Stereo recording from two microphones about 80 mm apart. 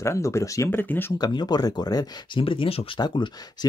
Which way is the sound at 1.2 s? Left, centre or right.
Left.